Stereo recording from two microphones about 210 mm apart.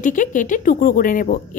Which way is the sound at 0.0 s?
35° left (ahead or behind).